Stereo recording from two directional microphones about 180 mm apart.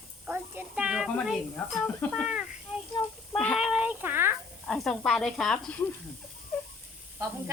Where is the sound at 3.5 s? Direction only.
5° right (ahead or behind).